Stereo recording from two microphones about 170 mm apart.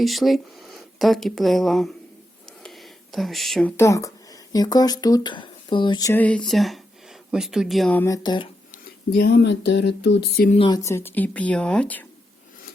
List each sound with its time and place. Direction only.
0.0 s speech: centre (ahead or behind)
2.6 s a sound: centre (ahead or behind)
3.8 s speech: 20° left (ahead or behind)
6.1 s speech: 5° left (ahead or behind)
7.9 s speech: 20° left (ahead or behind)
9.1 s a sound: 75° left (ahead or behind)
10.7 s speech: 20° left (ahead or behind)